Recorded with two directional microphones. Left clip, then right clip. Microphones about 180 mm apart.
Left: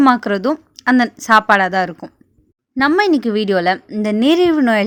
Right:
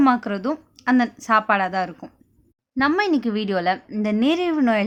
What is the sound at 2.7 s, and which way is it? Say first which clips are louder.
A woman's voice: left 6 dB; 20° left (ahead or behind).